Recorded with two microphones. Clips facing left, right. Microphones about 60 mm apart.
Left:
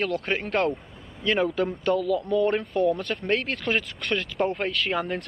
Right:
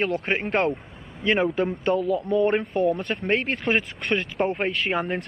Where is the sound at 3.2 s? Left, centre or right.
Centre.